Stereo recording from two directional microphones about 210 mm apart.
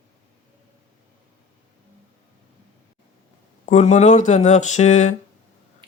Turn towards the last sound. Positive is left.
turn(degrees=35)  # may be behind; listen again after turning